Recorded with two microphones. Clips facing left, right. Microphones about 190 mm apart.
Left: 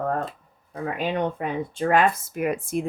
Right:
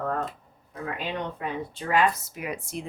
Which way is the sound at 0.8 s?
50° left (ahead or behind).